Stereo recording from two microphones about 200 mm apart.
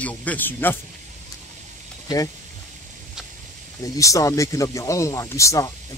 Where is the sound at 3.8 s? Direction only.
15° left (ahead or behind).